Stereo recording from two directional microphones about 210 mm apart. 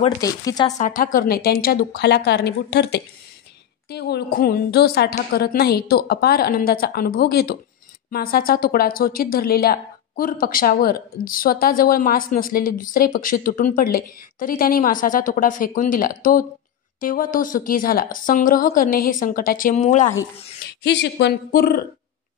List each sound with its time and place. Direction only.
0.2 s speech: 15° left (ahead or behind)
0.7 s a woman's voice: 35° left (ahead or behind)
20.8 s a woman's voice: 55° left (ahead or behind)